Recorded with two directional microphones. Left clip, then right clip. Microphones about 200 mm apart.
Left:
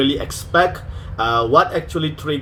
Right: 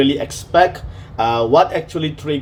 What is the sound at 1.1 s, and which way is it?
Speech, 15° right (ahead or behind).